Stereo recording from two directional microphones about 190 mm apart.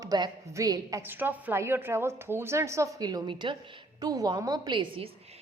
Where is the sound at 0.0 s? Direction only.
20° right (ahead or behind).